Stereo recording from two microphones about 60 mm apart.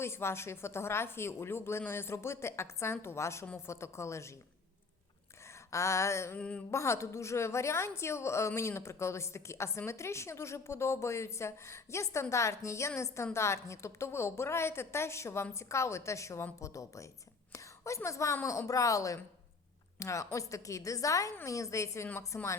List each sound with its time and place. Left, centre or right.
0.0 s a woman's voice: left
5.7 s a woman's voice: left